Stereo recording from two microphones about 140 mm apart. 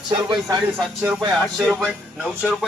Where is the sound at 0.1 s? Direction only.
30° right (ahead or behind).